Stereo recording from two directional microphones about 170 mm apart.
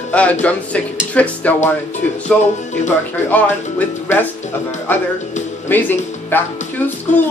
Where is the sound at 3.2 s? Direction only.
10° left (ahead or behind).